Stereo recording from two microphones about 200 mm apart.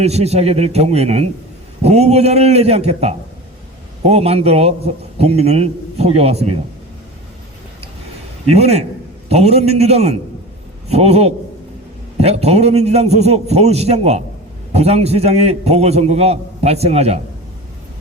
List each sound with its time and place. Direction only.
0.0 s a man's voice: 30° right (ahead or behind)
8.4 s a man's voice: 30° right (ahead or behind)